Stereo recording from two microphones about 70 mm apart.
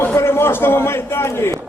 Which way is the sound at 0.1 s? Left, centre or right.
Left.